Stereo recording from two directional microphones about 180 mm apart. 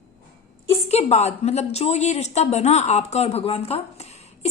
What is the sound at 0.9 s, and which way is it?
A woman's voice, 35° left (ahead or behind).